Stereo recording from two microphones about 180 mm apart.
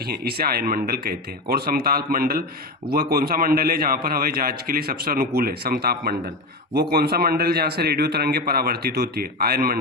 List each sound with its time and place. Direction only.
0.0 s a man's voice: 60° right (ahead or behind)